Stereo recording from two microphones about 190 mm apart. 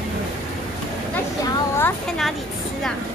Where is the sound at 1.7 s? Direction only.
10° left (ahead or behind).